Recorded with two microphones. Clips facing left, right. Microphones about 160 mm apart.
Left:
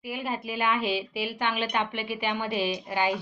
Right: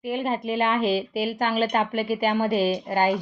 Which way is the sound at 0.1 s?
45° right (ahead or behind).